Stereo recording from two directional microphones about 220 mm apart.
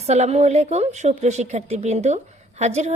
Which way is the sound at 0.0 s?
30° right (ahead or behind).